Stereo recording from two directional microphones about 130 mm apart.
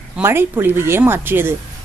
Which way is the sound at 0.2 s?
15° right (ahead or behind).